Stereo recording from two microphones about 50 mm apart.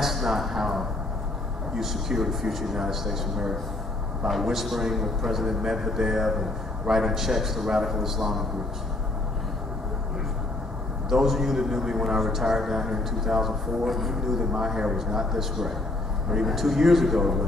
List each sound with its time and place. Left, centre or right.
0.0 s a sound: centre
1.8 s a man's voice: centre
11.1 s a man's voice: centre